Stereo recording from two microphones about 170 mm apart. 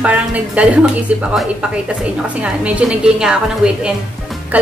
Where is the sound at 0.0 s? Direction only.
5° right (ahead or behind).